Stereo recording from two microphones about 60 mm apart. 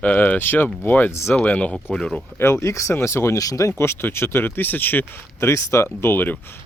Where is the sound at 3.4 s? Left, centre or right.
Left.